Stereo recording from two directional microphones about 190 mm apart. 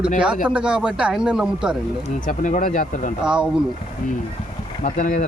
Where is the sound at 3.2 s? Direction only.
5° right (ahead or behind).